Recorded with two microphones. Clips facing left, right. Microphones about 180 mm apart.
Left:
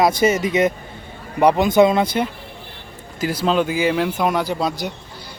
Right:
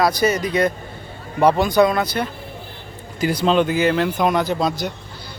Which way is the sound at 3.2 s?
5° left (ahead or behind).